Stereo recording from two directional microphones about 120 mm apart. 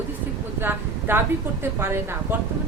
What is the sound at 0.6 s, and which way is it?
A woman's voice, 20° right (ahead or behind).